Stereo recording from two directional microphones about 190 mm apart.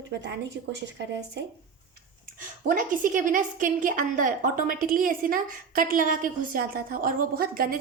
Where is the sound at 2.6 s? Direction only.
45° right (ahead or behind).